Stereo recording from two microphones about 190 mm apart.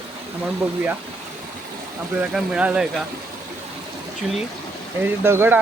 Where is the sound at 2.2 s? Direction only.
5° right (ahead or behind).